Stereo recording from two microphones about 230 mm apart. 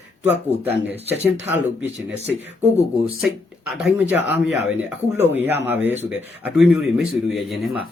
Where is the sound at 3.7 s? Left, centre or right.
Centre.